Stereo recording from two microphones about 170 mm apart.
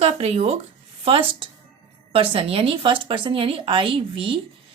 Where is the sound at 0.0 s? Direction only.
35° right (ahead or behind).